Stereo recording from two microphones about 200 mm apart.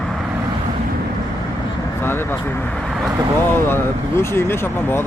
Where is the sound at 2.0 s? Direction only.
10° left (ahead or behind).